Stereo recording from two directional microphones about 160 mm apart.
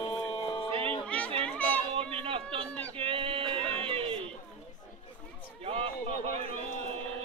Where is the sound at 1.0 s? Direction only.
10° left (ahead or behind).